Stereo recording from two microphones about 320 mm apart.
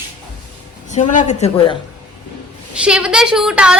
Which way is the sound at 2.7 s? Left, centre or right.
Centre.